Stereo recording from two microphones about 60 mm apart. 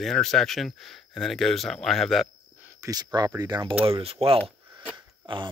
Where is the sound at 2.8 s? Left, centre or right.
Right.